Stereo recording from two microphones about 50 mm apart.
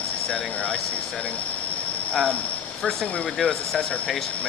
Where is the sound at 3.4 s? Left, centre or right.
Centre.